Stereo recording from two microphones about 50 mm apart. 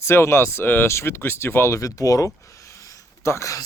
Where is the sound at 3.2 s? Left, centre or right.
Left.